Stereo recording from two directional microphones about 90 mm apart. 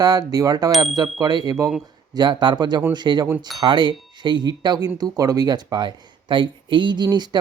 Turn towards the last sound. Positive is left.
turn(degrees=-55)  # may be behind; listen again after turning